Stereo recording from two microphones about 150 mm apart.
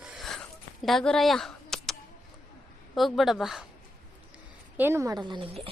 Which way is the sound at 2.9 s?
Centre (ahead or behind).